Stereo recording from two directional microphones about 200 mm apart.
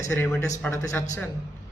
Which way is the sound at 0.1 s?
5° left (ahead or behind).